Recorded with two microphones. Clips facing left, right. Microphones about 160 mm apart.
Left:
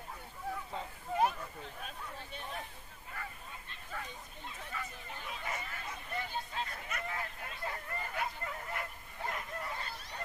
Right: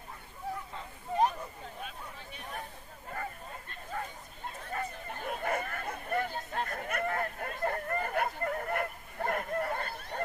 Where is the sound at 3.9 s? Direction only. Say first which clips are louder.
Right 5 dB; 50° right (ahead or behind).